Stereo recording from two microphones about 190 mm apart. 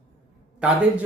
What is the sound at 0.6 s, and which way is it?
Speech, 5° right (ahead or behind).